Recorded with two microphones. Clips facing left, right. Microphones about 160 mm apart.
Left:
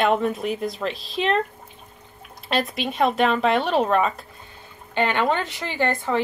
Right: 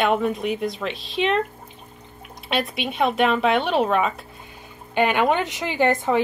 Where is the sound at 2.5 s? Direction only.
Centre (ahead or behind).